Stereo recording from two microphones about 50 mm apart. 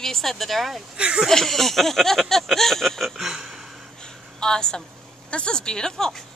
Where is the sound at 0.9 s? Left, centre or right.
Right.